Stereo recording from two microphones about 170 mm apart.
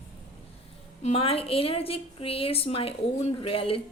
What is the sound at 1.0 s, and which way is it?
A woman's voice, 35° left (ahead or behind).